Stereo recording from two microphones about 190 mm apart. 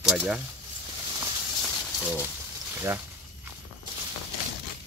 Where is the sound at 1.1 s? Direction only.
20° right (ahead or behind).